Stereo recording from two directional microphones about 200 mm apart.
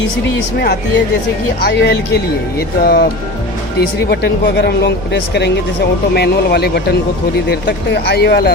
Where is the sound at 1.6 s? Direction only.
55° left (ahead or behind).